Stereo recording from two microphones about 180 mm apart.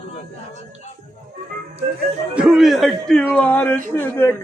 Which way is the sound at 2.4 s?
5° right (ahead or behind).